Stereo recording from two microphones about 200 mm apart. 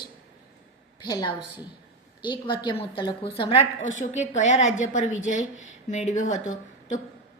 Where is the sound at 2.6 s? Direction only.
25° left (ahead or behind).